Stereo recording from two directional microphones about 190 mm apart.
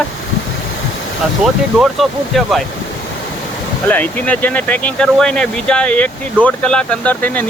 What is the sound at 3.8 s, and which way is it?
Speech, 10° left (ahead or behind).